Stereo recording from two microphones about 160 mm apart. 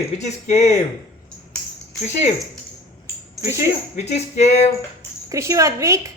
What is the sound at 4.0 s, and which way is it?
Speech, 45° left (ahead or behind).